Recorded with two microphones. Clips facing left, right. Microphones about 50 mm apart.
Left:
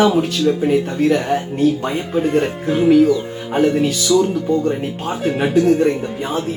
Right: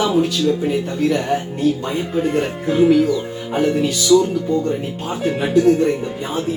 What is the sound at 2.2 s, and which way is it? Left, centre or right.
Speech, centre.